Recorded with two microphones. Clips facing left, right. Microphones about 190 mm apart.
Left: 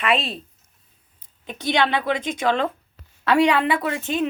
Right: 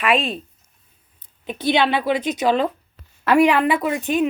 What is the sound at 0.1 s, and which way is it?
Speech, 35° left (ahead or behind).